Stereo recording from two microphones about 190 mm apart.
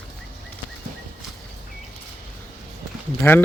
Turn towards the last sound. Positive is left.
turn(degrees=10)  # may be behind; listen again after turning